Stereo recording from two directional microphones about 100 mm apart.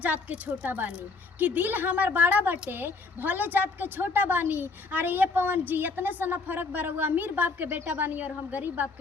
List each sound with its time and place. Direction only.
0.0 s a woman's voice: 15° right (ahead or behind)